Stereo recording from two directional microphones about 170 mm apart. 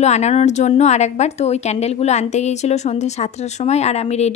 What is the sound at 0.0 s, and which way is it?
A woman's voice, 40° left (ahead or behind).